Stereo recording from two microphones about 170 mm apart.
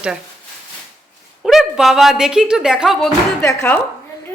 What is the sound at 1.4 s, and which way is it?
Speech, centre (ahead or behind).